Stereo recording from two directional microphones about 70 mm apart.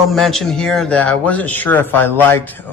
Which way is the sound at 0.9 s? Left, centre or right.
Centre.